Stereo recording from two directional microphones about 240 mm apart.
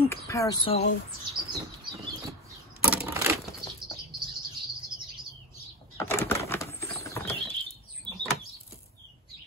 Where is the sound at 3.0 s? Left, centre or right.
Centre.